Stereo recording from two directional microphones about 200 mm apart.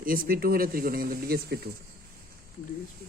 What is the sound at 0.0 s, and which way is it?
Speech, 45° right (ahead or behind).